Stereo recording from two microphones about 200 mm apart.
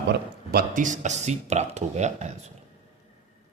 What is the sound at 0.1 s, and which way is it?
Speech, 45° right (ahead or behind).